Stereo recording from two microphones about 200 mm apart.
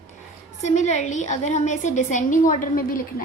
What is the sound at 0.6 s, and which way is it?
A woman's voice, 35° left (ahead or behind).